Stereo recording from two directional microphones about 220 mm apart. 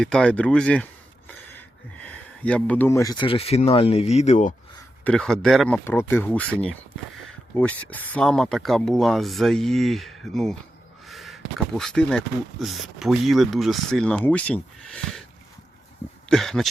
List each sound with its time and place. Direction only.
0.0 s speech: 5° left (ahead or behind); by 4.5 s 30° left (ahead or behind)
5.0 s speech: 5° left (ahead or behind)
11.0 s crow: centre (ahead or behind)
11.8 s speech: 5° left (ahead or behind)
16.3 s speech: centre (ahead or behind)